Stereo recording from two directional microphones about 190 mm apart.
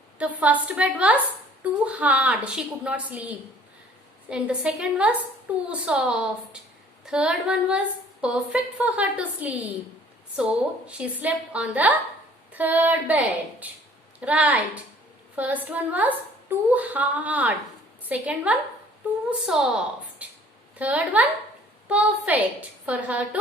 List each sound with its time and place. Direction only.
0.2 s a woman's voice: 5° right (ahead or behind)
20.2 s music: 10° right (ahead or behind)
20.7 s a woman's voice: 10° right (ahead or behind)